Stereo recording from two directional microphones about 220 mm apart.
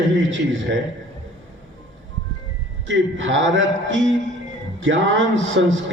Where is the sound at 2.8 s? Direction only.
60° right (ahead or behind).